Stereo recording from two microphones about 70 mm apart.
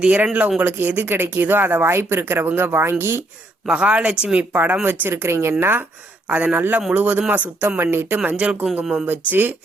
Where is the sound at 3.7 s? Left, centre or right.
Centre.